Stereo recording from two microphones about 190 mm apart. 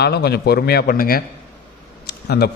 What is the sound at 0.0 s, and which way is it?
A man's voice, 60° left (ahead or behind).